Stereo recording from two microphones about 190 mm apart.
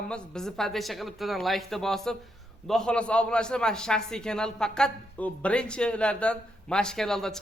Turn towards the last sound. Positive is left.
turn(degrees=5)  # may be behind; listen again after turning